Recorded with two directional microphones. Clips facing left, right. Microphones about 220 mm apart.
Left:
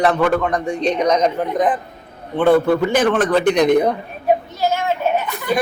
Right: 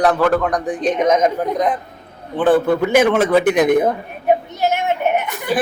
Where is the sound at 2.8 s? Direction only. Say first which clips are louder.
Right 2 dB; 10° right (ahead or behind).